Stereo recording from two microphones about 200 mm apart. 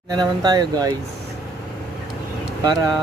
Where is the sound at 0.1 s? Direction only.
20° right (ahead or behind).